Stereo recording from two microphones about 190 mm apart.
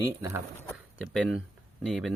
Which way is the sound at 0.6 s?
Centre (ahead or behind).